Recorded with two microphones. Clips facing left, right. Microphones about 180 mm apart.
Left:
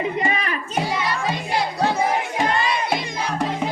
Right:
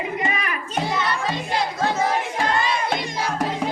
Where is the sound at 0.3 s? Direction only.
30° left (ahead or behind).